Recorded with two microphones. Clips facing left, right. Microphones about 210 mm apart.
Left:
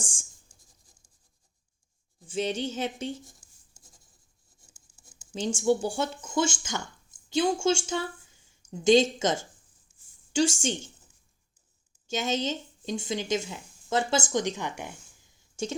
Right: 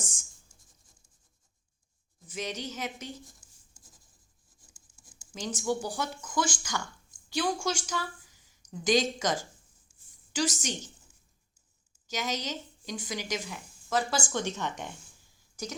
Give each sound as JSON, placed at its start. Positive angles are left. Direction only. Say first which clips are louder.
{"t": 0.0, "sound": "writing", "louder": "left 2 dB", "side_deg": 30}
{"t": 2.2, "sound": "speech", "louder": "left 7 dB", "side_deg": 30}
{"t": 4.7, "sound": "speech", "louder": "left 1 dB", "side_deg": 20}
{"t": 12.0, "sound": "speech", "louder": "left 5 dB", "side_deg": 25}